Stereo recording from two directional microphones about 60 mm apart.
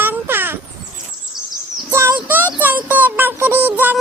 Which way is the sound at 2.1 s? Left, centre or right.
Right.